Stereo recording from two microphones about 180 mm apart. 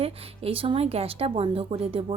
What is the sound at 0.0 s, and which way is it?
A woman's voice, 30° right (ahead or behind).